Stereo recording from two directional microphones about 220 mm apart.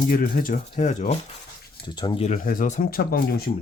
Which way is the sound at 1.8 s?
20° left (ahead or behind).